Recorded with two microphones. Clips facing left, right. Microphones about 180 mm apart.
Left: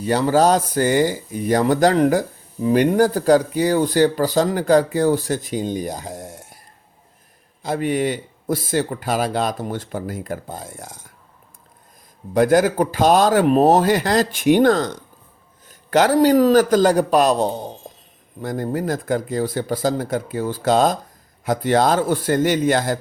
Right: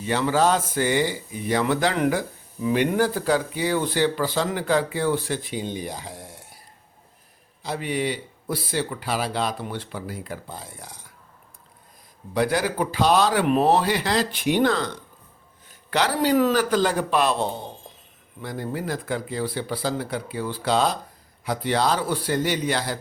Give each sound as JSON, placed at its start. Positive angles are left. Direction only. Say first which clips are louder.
{"t": 0.0, "sound": "speech", "louder": "left 5 dB", "side_deg": 40}
{"t": 7.6, "sound": "speech", "louder": "left 6 dB", "side_deg": 50}
{"t": 12.3, "sound": "a man's voice", "louder": "left 8 dB", "side_deg": 45}